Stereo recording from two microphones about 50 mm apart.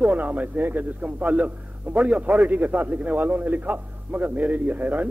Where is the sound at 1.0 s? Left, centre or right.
Right.